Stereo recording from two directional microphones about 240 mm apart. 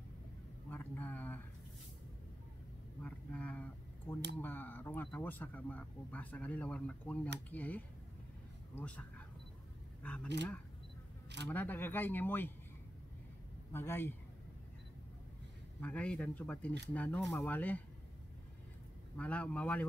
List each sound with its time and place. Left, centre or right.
0.7 s speech: centre
3.0 s a sound: centre
4.1 s speech: centre
10.2 s speech: right
11.4 s speech: centre
13.7 s speech: centre
15.8 s speech: centre
19.1 s speech: centre